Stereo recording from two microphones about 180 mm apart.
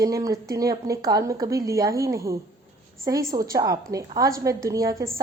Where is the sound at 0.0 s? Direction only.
20° right (ahead or behind).